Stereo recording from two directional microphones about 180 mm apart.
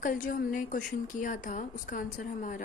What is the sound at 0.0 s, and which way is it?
A woman's voice, 50° left (ahead or behind).